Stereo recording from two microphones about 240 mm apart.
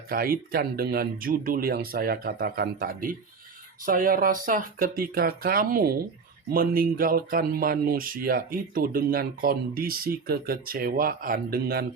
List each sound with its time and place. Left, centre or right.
0.1 s speech: right